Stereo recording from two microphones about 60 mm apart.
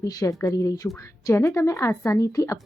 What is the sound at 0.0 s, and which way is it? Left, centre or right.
Speech, left.